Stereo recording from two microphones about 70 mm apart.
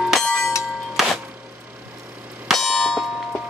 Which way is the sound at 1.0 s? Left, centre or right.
Centre.